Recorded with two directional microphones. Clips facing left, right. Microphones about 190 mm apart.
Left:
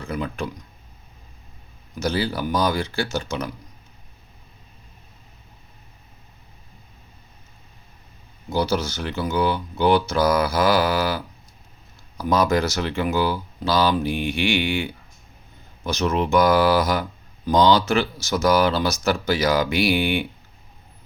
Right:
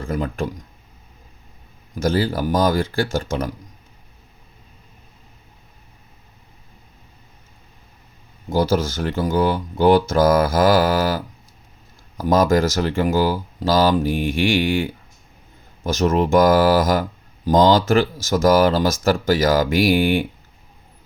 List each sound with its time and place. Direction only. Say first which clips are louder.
0.0 s speech: right 4 dB; 50° right (ahead or behind)
2.0 s speech: right 4 dB; 45° right (ahead or behind)
8.4 s speech: right 4 dB; 45° right (ahead or behind)